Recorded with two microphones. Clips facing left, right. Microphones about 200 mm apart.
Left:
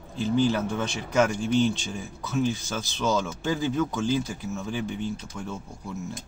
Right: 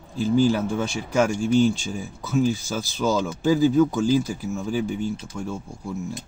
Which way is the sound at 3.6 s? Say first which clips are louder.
Right 8 dB; 35° right (ahead or behind).